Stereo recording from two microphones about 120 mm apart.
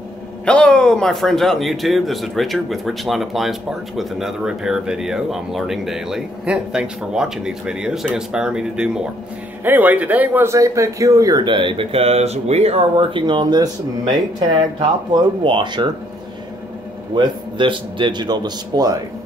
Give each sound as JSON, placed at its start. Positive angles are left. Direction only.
{"t": 0.5, "sound": "speech", "side_deg": 10}
{"t": 11.4, "sound": "speech", "side_deg": -45}
{"t": 12.9, "sound": "speech", "side_deg": -40}
{"t": 17.1, "sound": "speech", "side_deg": -40}